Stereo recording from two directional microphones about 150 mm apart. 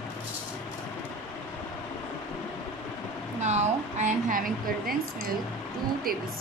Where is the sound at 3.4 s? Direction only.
50° right (ahead or behind).